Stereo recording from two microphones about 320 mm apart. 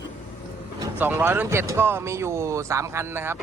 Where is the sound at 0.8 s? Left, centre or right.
Centre.